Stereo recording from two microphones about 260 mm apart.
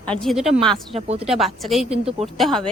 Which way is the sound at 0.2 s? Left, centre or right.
Centre.